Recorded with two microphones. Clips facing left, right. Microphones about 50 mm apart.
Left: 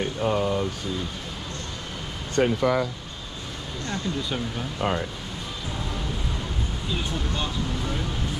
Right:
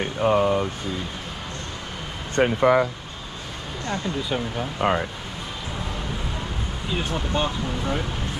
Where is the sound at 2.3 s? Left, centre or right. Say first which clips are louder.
Right 4 dB; right.